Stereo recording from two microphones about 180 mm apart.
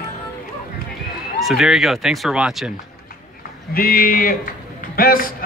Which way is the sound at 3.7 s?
55° left (ahead or behind).